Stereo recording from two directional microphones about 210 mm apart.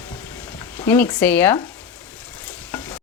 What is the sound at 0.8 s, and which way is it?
Speech, 10° left (ahead or behind).